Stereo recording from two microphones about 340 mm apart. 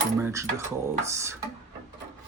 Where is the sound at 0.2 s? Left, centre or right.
Centre.